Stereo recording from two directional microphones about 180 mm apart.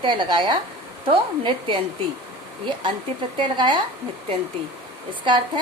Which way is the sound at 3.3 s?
25° right (ahead or behind).